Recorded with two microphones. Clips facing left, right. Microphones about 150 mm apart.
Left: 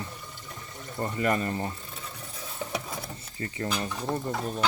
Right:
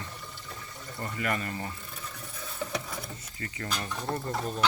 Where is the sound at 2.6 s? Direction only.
20° left (ahead or behind).